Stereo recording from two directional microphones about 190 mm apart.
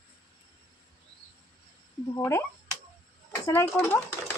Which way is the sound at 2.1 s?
15° left (ahead or behind).